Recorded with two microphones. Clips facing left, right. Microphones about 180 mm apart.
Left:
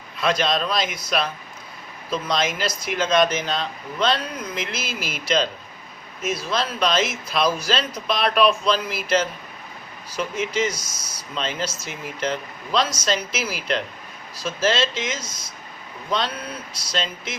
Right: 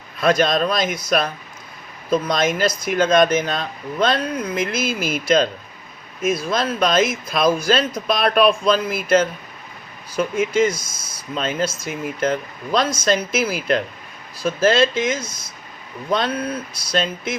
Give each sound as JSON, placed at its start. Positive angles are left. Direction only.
{"t": 0.2, "sound": "speech", "side_deg": -50}
{"t": 16.9, "sound": "speech", "side_deg": -55}